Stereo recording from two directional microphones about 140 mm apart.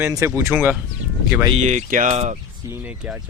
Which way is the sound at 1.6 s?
60° right (ahead or behind).